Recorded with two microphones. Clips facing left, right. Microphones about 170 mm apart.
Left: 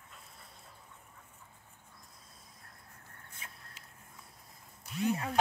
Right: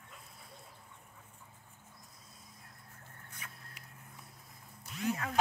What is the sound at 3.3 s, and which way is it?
Vehicle, 25° left (ahead or behind).